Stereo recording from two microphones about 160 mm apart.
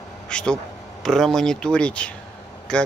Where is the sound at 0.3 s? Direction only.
5° left (ahead or behind).